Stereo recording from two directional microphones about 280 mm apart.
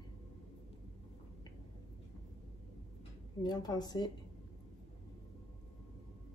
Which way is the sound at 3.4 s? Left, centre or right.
Centre.